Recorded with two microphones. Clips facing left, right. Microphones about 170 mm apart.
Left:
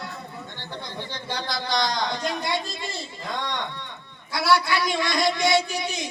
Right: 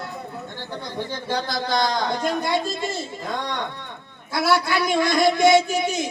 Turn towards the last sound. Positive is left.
turn(degrees=-45)  # may be behind; listen again after turning